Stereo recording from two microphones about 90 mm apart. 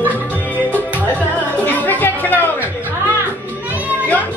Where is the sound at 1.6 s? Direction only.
20° left (ahead or behind).